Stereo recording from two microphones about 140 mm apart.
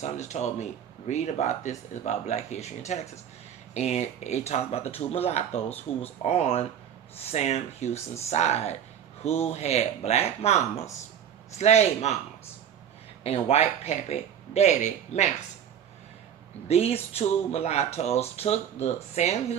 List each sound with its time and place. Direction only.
0.0 s speech: 55° left (ahead or behind)
13.2 s speech: 45° left (ahead or behind)
16.6 s speech: 45° left (ahead or behind)